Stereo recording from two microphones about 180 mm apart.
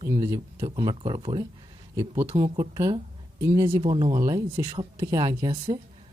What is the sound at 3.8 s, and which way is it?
Speech, 30° right (ahead or behind).